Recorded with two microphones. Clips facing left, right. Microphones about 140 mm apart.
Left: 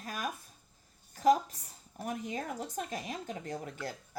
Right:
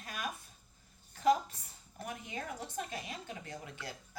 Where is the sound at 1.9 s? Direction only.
40° left (ahead or behind).